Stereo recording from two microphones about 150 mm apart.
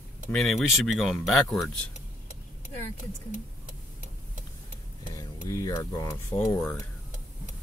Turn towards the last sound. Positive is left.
turn(degrees=5)  # may be behind; listen again after turning